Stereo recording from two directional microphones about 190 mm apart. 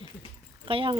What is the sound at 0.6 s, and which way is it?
Speech, 25° right (ahead or behind).